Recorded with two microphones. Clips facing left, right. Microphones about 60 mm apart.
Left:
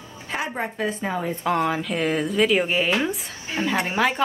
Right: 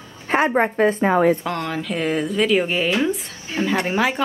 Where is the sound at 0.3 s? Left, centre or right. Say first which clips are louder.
Right 10 dB; right.